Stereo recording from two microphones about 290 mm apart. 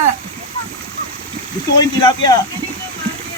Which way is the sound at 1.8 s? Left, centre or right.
Centre.